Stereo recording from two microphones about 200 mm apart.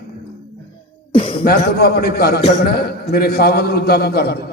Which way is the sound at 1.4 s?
50° left (ahead or behind).